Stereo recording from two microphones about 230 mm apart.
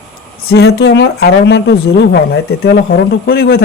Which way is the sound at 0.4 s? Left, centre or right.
Left.